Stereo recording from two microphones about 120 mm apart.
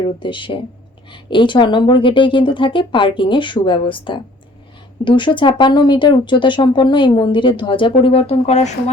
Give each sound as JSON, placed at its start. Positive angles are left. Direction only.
{"t": 0.2, "sound": "speech", "side_deg": 45}